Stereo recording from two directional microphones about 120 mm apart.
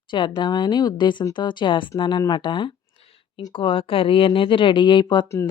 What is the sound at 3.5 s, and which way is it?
Speech, 45° left (ahead or behind).